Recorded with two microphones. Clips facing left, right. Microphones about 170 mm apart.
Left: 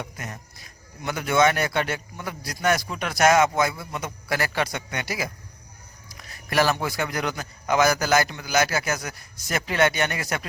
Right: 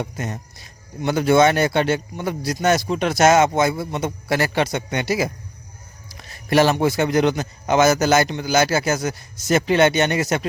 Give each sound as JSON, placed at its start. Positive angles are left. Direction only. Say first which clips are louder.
{"t": 0.0, "sound": "speech", "louder": "right 8 dB", "side_deg": -25}